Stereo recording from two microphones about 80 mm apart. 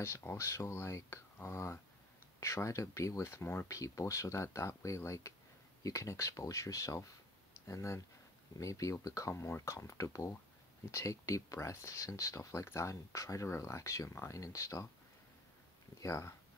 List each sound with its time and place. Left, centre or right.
0.0 s speech: left
16.0 s speech: left